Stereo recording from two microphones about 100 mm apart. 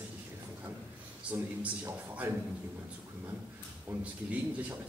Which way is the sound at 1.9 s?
25° right (ahead or behind).